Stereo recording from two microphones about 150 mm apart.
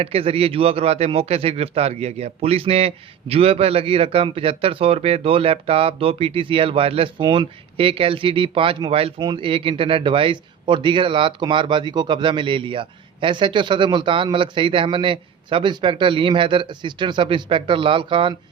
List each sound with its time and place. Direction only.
0.0 s a man's voice: 40° right (ahead or behind)